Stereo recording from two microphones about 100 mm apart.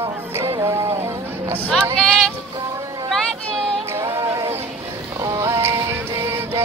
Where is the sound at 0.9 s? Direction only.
25° right (ahead or behind).